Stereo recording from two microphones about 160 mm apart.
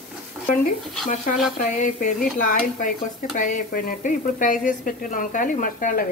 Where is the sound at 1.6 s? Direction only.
55° left (ahead or behind).